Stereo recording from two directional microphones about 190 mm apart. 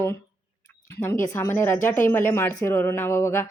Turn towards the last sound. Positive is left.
turn(degrees=15)  # may be behind; listen again after turning